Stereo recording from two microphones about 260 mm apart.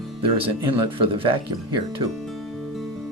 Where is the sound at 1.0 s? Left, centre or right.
Centre.